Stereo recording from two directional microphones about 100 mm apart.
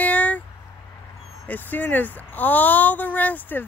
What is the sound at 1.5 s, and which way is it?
Speech, 15° left (ahead or behind).